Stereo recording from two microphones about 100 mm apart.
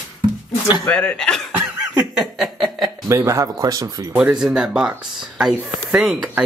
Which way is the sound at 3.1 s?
30° right (ahead or behind).